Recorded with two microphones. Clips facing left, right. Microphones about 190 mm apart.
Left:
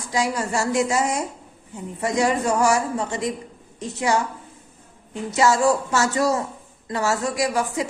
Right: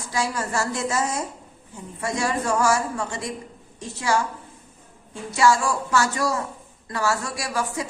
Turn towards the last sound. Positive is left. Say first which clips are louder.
# left 5 dB
turn(degrees=20)  # may be behind; listen again after turning